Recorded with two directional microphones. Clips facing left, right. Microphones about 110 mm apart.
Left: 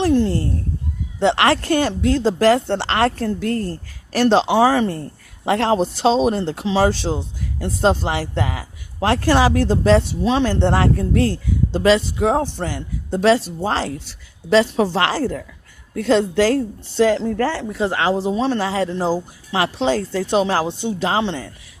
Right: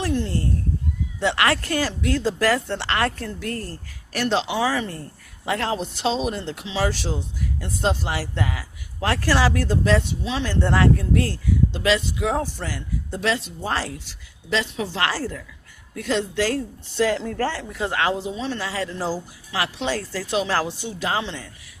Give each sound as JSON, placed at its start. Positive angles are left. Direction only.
{"t": 0.0, "sound": "a sound", "side_deg": 30}
{"t": 1.2, "sound": "speech", "side_deg": 30}
{"t": 15.2, "sound": "a woman's voice", "side_deg": 50}
{"t": 16.0, "sound": "speech", "side_deg": 35}
{"t": 19.5, "sound": "speech", "side_deg": 30}